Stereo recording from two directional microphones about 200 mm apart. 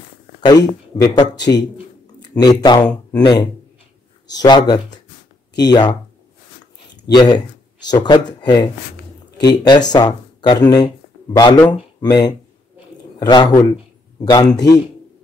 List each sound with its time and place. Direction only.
0.4 s speech: 20° left (ahead or behind)
7.1 s speech: 20° left (ahead or behind)
12.0 s speech: 20° left (ahead or behind)